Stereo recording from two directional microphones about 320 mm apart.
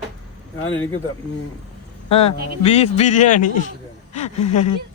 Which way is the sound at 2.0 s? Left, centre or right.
Centre.